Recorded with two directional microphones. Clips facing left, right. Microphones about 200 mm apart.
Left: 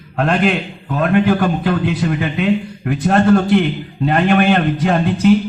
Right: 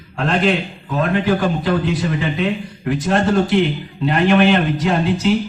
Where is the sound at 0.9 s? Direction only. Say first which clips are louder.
Left 3 dB; 55° left (ahead or behind).